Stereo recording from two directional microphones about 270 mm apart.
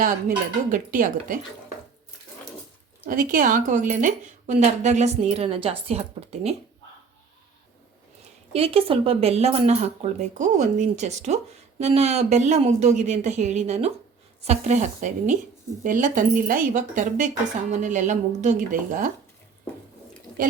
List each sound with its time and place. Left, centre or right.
0.0 s a woman's voice: right
3.1 s a woman's voice: right
8.5 s a woman's voice: right